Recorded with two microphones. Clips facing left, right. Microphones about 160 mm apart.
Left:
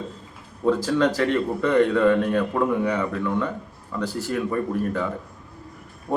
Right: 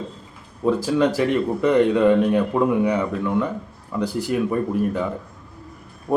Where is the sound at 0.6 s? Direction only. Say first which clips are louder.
Right 1 dB; 10° right (ahead or behind).